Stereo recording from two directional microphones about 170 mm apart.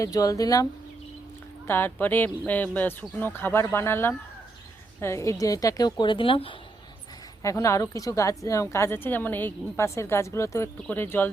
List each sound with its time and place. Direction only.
0.0 s a woman's voice: 20° left (ahead or behind)
7.4 s speech: 15° left (ahead or behind)